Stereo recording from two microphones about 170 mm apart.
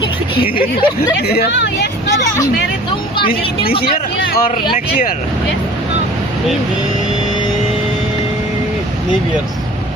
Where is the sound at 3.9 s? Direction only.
55° left (ahead or behind).